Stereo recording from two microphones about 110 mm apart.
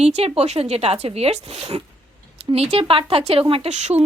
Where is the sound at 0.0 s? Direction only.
70° right (ahead or behind).